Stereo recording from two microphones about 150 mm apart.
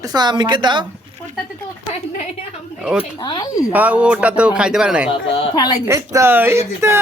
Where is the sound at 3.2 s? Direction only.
25° left (ahead or behind).